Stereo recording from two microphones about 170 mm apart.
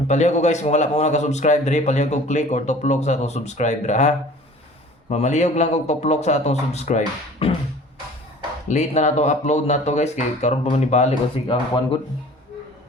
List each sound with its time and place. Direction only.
0.1 s a man's voice: 45° left (ahead or behind)
8.6 s a man's voice: 45° left (ahead or behind)
11.5 s speech: 25° left (ahead or behind)